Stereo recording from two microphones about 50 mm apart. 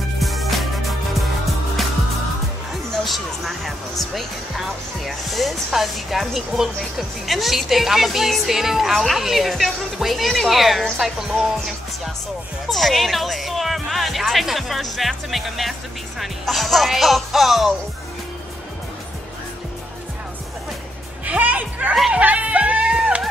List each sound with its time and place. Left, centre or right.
0.2 s music: centre
3.0 s music: centre
4.6 s speech: centre
21.3 s music: right